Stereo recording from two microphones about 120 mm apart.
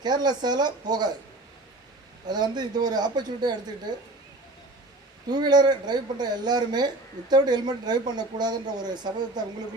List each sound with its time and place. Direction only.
0.0 s speech: 35° right (ahead or behind)
2.2 s speech: 35° right (ahead or behind)
5.3 s speech: 35° right (ahead or behind)